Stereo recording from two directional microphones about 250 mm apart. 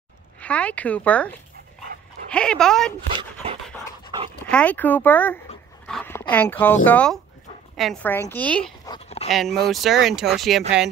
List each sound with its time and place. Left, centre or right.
0.4 s a woman's voice: centre
3.4 s dog: right
4.5 s a woman's voice: centre
8.8 s a sound: left
9.3 s a woman's voice: centre